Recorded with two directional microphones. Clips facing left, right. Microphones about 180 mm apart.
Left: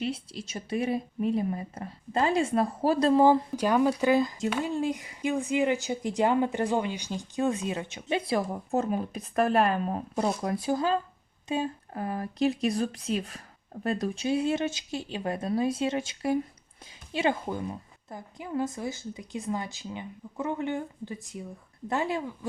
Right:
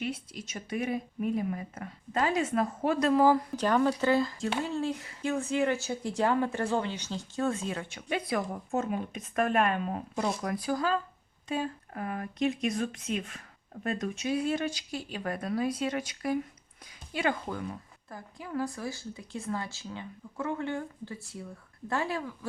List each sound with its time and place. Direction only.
0.0 s speech: 30° left (ahead or behind)
3.5 s a woman's voice: 10° left (ahead or behind)